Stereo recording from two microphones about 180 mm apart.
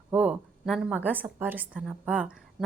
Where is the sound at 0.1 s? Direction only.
5° right (ahead or behind).